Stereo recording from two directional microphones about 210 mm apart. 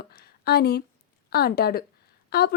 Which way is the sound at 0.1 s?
50° left (ahead or behind).